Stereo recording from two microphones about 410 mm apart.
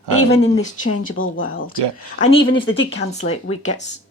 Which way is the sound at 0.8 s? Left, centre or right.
Centre.